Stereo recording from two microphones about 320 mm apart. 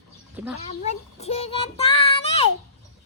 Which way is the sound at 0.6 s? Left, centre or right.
Centre.